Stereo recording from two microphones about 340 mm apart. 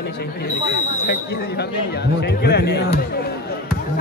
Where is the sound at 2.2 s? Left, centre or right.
Left.